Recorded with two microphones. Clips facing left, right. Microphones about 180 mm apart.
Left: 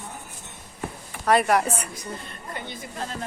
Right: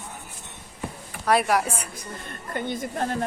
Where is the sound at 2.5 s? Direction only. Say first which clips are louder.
Right 8 dB; 50° right (ahead or behind).